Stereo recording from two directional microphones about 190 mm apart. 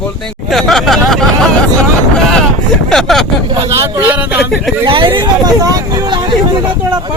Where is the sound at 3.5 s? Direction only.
15° right (ahead or behind).